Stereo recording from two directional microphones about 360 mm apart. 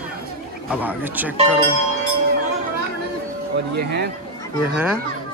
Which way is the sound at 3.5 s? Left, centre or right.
Right.